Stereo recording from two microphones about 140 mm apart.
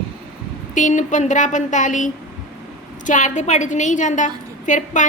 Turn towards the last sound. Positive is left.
turn(degrees=65)  # may be behind; listen again after turning